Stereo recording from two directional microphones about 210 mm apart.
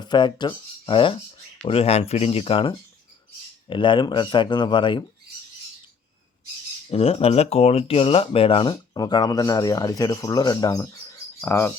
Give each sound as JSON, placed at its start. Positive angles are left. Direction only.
{"t": 0.0, "sound": "speech", "side_deg": 20}
{"t": 6.9, "sound": "speech", "side_deg": 25}